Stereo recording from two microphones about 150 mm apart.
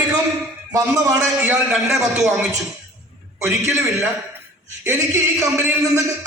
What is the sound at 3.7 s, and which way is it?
A man's voice, 20° right (ahead or behind).